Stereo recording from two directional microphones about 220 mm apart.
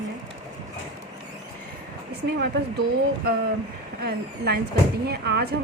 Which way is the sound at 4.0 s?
45° right (ahead or behind).